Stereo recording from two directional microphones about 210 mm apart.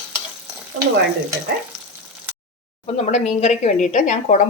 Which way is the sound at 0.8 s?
90° right.